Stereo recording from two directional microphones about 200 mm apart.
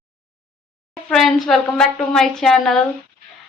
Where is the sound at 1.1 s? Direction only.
Centre (ahead or behind).